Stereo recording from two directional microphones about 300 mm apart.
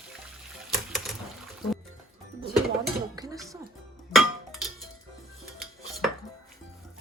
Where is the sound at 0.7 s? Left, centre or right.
Centre.